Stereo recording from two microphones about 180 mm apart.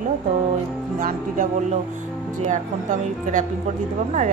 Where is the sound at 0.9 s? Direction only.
50° right (ahead or behind).